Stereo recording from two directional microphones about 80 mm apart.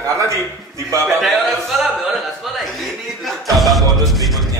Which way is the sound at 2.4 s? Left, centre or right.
Centre.